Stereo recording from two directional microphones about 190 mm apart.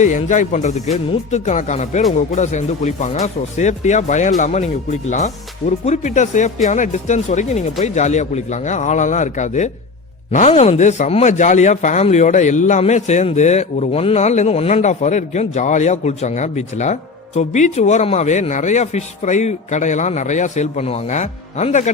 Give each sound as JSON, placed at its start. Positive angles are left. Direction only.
{"t": 0.0, "sound": "speech", "side_deg": 40}